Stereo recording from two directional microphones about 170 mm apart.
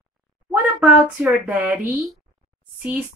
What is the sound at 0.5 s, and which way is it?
Speech, 10° right (ahead or behind).